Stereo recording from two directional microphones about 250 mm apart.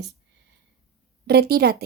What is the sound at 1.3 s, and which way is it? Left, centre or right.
Speech, right.